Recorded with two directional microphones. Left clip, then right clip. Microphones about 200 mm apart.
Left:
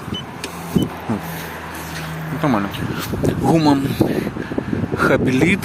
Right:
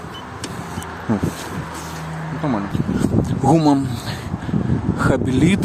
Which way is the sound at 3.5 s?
20° right (ahead or behind).